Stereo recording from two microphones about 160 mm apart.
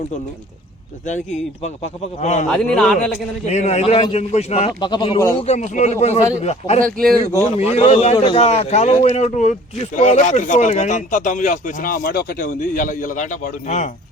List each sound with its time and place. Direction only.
1.0 s speech: 45° left (ahead or behind)
2.5 s a man's voice: 5° left (ahead or behind)
3.4 s speech: 45° left (ahead or behind)
4.8 s speech: 25° left (ahead or behind)
5.5 s speech: 50° left (ahead or behind)
6.7 s speech: 60° right (ahead or behind)
7.5 s speech: 40° left (ahead or behind)
8.1 s speech: 25° left (ahead or behind)
8.4 s speech: 40° left (ahead or behind)